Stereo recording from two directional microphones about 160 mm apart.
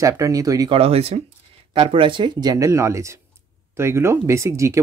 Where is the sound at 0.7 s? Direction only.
40° right (ahead or behind); by 4.8 s 20° right (ahead or behind).